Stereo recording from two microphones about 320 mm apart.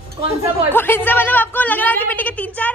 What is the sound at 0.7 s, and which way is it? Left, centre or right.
A woman's voice, centre.